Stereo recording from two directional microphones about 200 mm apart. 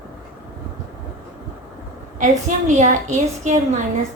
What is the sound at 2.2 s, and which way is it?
Speech, 40° right (ahead or behind).